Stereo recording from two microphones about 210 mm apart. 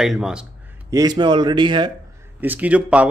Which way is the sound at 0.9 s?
20° right (ahead or behind).